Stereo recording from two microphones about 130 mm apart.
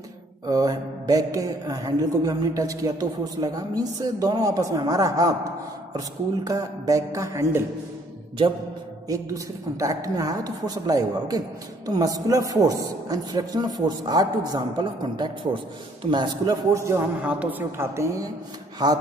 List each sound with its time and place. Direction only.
0.5 s speech: 30° right (ahead or behind)
9.1 s speech: 25° right (ahead or behind)
16.7 s speech: 20° right (ahead or behind)
17.2 s a woman's voice: 10° right (ahead or behind); by 19.0 s 30° right (ahead or behind)